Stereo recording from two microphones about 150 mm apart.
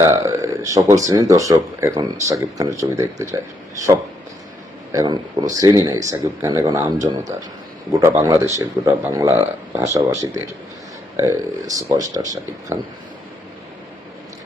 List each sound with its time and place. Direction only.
0.0 s speech: 20° right (ahead or behind)
4.9 s speech: 25° right (ahead or behind)